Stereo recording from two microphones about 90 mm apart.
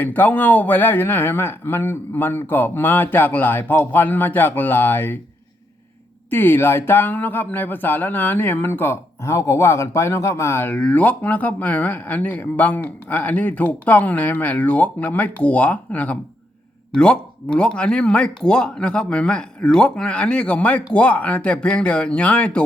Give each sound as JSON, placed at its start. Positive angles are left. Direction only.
{"t": 0.0, "sound": "speech", "side_deg": 20}
{"t": 6.3, "sound": "speech", "side_deg": 25}